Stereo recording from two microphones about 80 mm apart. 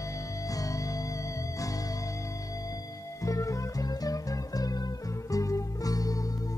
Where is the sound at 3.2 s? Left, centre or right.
Left.